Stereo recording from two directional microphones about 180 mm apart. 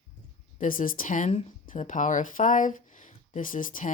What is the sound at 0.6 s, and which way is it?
Speech, 50° left (ahead or behind).